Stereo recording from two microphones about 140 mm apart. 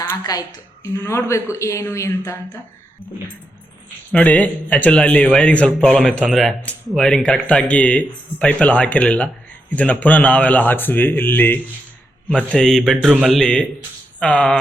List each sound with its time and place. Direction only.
0.2 s a woman's voice: 30° left (ahead or behind)
0.9 s speech: 15° left (ahead or behind)
4.1 s a man's voice: 10° left (ahead or behind)